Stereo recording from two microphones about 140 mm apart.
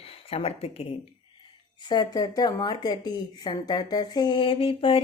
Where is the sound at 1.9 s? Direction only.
30° left (ahead or behind).